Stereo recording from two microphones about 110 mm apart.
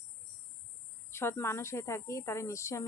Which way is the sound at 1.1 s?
25° left (ahead or behind).